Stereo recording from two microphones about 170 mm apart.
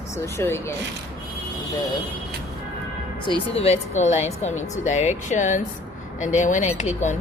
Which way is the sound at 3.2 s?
35° left (ahead or behind).